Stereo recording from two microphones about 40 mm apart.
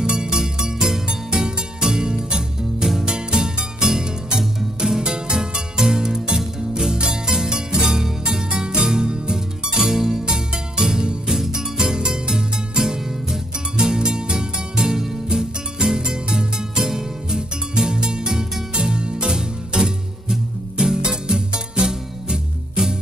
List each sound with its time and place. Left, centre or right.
0.0 s music: right